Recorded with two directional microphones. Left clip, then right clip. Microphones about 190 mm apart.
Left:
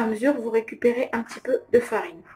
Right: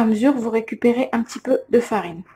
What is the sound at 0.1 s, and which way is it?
Speech, 35° right (ahead or behind).